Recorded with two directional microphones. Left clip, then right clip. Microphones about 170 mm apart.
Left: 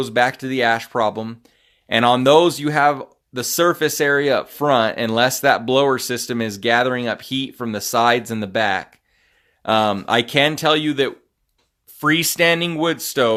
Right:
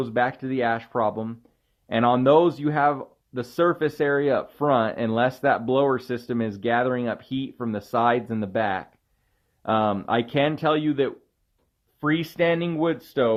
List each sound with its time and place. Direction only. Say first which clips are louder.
0.0 s speech: left 6 dB; 30° left (ahead or behind)
11.9 s speech: left 7 dB; 40° left (ahead or behind)